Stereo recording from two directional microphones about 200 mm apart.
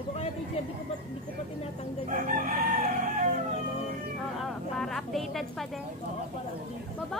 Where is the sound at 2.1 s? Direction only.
40° right (ahead or behind).